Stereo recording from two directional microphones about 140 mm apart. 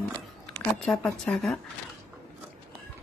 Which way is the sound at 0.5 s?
5° left (ahead or behind).